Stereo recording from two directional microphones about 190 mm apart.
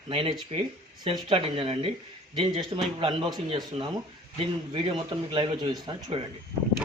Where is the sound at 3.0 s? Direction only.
25° right (ahead or behind).